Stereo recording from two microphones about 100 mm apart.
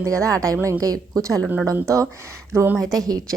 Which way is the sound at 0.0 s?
30° right (ahead or behind).